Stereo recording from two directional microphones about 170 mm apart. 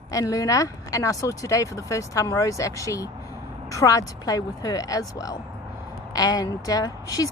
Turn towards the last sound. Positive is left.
turn(degrees=20)  # may be behind; listen again after turning